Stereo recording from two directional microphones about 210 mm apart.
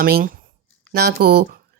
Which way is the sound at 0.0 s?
45° right (ahead or behind).